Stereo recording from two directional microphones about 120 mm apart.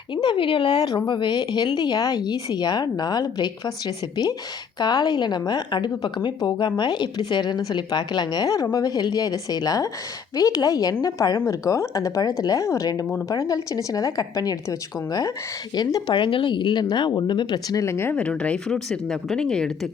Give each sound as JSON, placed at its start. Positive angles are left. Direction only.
{"t": 0.1, "sound": "a woman's voice", "side_deg": 40}
{"t": 17.8, "sound": "speech", "side_deg": 20}